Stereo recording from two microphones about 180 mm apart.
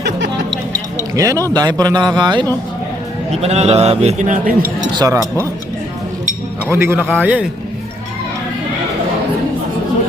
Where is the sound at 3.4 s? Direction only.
35° right (ahead or behind).